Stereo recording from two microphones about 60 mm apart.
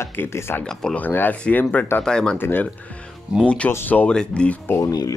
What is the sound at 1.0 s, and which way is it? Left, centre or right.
Speech, left.